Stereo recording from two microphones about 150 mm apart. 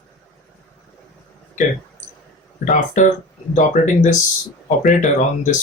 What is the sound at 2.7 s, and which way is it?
Speech, 55° left (ahead or behind).